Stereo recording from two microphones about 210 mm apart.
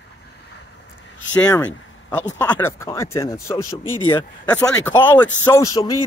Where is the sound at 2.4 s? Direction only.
10° left (ahead or behind).